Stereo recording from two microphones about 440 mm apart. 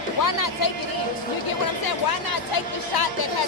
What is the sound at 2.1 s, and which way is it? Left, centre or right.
A woman's voice, left.